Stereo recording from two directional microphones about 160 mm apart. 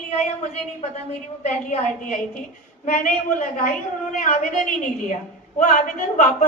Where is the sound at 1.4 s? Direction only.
45° left (ahead or behind).